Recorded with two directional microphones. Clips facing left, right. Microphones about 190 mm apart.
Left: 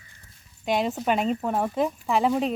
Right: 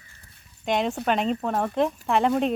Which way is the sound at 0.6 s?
5° left (ahead or behind).